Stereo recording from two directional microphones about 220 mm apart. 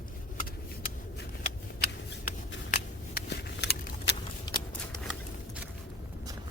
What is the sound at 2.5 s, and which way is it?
Scissors, 45° left (ahead or behind).